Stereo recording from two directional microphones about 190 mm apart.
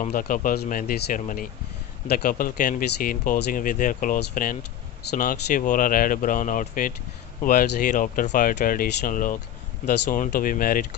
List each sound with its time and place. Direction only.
0.0 s speech: 45° left (ahead or behind)